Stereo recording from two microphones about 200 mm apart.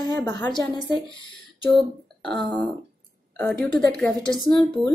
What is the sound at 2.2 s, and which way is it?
A woman's voice, 5° left (ahead or behind).